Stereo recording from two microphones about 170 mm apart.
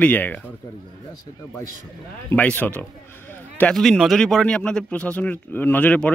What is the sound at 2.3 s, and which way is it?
Speech, 10° left (ahead or behind).